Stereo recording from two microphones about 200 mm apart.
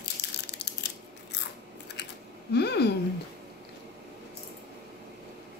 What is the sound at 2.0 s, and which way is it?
Typing, 60° left (ahead or behind).